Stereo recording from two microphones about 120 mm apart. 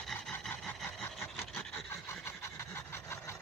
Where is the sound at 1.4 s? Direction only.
5° left (ahead or behind).